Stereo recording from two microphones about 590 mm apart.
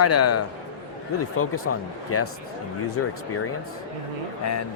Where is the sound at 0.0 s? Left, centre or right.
Left.